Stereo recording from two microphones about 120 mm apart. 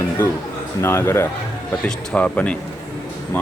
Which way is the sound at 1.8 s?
10° left (ahead or behind).